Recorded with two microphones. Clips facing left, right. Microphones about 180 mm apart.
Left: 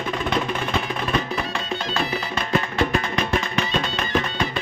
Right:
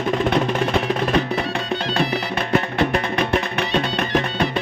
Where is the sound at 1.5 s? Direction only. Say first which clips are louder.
Right 4 dB; 65° right (ahead or behind).